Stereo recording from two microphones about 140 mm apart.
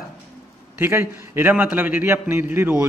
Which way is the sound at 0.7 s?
15° right (ahead or behind).